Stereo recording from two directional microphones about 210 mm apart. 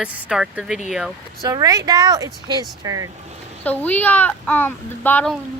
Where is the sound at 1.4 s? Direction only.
15° right (ahead or behind).